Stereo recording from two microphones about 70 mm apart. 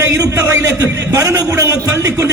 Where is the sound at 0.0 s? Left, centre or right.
Right.